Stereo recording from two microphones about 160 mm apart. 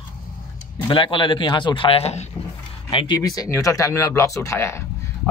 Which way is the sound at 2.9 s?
30° left (ahead or behind).